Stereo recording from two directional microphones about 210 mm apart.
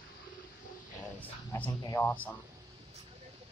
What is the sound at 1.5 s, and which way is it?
Speech, 15° left (ahead or behind).